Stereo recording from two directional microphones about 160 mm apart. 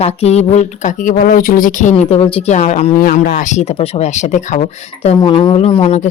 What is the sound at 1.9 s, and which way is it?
Speech, 40° left (ahead or behind).